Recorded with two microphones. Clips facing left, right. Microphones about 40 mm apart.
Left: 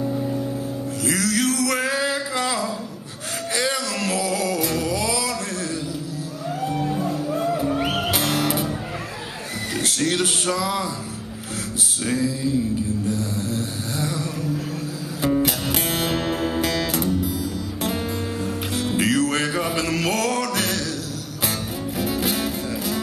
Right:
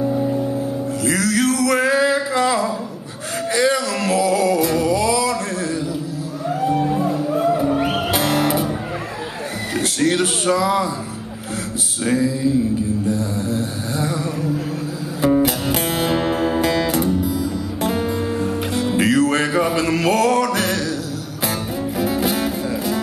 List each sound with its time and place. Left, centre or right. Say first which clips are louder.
0.0 s music: right 5 dB; centre
1.0 s male singing: right 3 dB; centre
3.5 s a sound: right 6 dB; centre
6.6 s music: right 6 dB; centre
9.8 s speech: right 4 dB; centre
12.0 s music: right 5 dB; centre
13.1 s mantra: right 4 dB; centre
15.2 s music: right 5 dB; centre
21.9 s music: right 4 dB; centre